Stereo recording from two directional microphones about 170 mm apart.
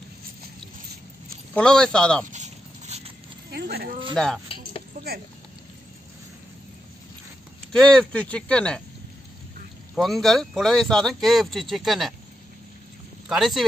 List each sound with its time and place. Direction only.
1.5 s speech: 5° left (ahead or behind)
2.3 s zipper: 40° right (ahead or behind)
3.5 s speech: 70° right (ahead or behind)
4.1 s speech: 5° left (ahead or behind)
4.9 s a sound: 60° right (ahead or behind)
7.7 s speech: 5° left (ahead or behind)
9.9 s speech: centre (ahead or behind)
13.3 s speech: centre (ahead or behind)